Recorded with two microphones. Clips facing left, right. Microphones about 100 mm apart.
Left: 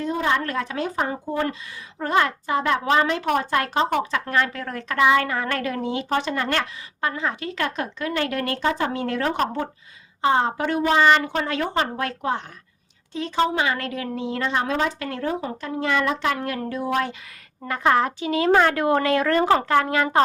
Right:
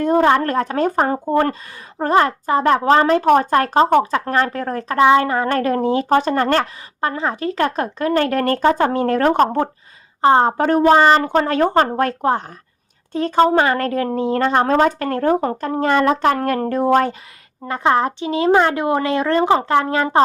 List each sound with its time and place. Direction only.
0.0 s a woman's voice: 50° right (ahead or behind)
17.7 s a woman's voice: 30° right (ahead or behind)